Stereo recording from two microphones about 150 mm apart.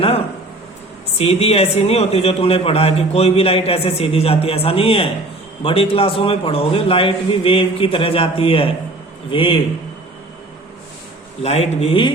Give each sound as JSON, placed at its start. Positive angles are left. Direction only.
{"t": 1.2, "sound": "a man's voice", "side_deg": 45}
{"t": 11.4, "sound": "speech", "side_deg": 45}